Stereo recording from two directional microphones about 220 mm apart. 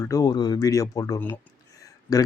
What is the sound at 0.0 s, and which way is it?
Speech, 15° left (ahead or behind).